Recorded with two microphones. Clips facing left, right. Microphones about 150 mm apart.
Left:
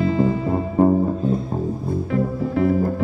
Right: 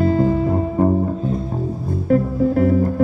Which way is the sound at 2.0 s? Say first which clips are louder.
Right 9 dB; 45° right (ahead or behind).